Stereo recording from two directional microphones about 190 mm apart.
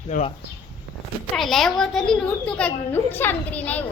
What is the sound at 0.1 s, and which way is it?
Speech, 45° left (ahead or behind).